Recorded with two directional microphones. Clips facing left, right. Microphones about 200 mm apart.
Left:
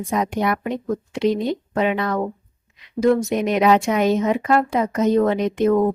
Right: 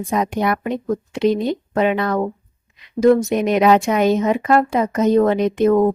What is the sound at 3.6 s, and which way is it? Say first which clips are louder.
Speech: right 2 dB; 50° right (ahead or behind).